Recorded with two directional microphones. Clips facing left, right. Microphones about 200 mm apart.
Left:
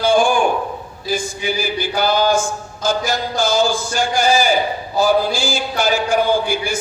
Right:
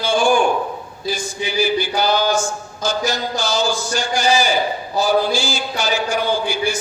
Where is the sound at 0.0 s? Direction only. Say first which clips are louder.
Left 4 dB; 55° left (ahead or behind).